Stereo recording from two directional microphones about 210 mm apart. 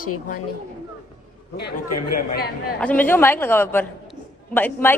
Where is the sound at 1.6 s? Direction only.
45° left (ahead or behind).